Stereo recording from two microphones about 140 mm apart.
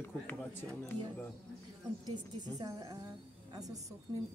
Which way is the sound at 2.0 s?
30° right (ahead or behind).